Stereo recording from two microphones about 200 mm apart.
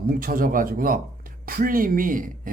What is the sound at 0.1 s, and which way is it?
Speech, 45° right (ahead or behind).